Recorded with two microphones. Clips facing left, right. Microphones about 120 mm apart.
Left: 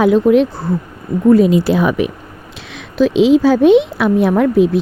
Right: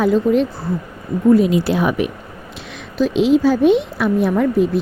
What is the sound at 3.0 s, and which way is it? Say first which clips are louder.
Speech: left 4 dB; 90° left.